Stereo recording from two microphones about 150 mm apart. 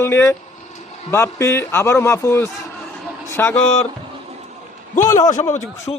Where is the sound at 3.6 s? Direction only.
45° left (ahead or behind).